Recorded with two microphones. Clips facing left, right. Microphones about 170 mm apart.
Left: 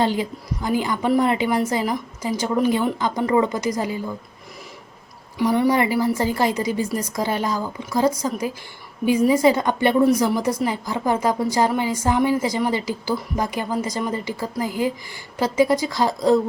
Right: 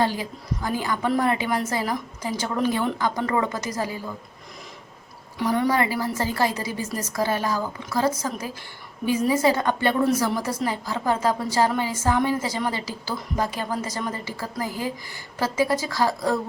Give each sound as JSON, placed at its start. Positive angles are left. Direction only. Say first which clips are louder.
{"t": 0.0, "sound": "a woman's voice", "louder": "left 3 dB", "side_deg": 20}
{"t": 5.4, "sound": "a woman's voice", "louder": "left 4 dB", "side_deg": 15}